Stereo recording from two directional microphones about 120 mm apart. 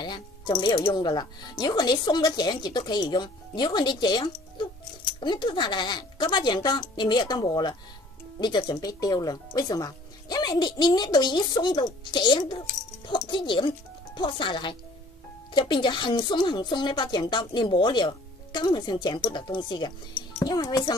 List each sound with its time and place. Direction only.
0.0 s speech: 35° left (ahead or behind)